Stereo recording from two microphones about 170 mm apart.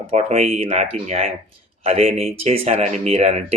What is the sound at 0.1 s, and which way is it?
Speech, 40° right (ahead or behind).